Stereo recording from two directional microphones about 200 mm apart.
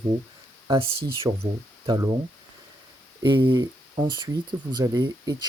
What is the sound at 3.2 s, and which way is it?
Speech, 25° right (ahead or behind).